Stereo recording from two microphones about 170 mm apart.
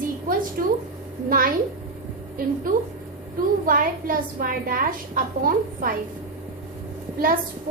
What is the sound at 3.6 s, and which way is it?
A woman's voice, 55° right (ahead or behind).